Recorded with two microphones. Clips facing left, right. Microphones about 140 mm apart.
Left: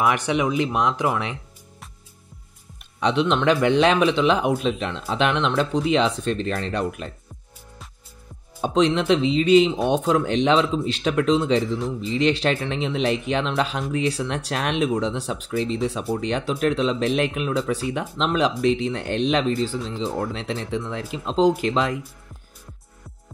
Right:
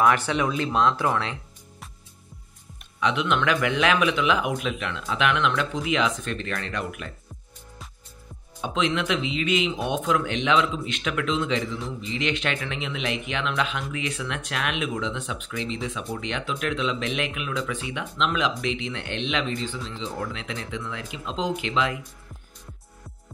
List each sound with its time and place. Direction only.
0.0 s speech: 15° left (ahead or behind)
3.0 s speech: 30° left (ahead or behind)
8.5 s speech: 35° left (ahead or behind)